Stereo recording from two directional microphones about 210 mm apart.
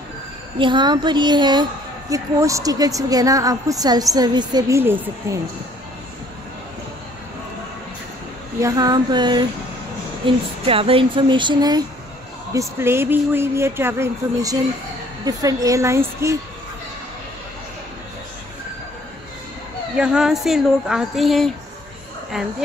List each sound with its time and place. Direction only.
0.6 s a woman's voice: 20° right (ahead or behind)
8.5 s a woman's voice: 15° right (ahead or behind)
20.0 s speech: 5° right (ahead or behind)